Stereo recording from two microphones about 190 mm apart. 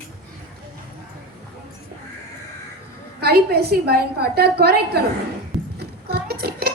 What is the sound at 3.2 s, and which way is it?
A woman's voice, 55° right (ahead or behind).